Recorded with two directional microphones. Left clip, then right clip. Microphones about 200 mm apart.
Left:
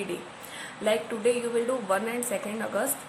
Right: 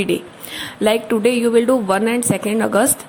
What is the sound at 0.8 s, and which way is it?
A woman's voice, 50° right (ahead or behind).